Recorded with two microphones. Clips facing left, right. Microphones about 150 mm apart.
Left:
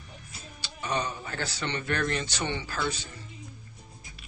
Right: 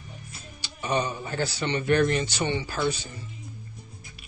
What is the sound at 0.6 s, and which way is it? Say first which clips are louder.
Speech: right 4 dB; 15° right (ahead or behind).